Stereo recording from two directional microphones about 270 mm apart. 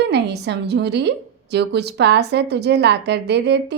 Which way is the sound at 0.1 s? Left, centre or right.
Right.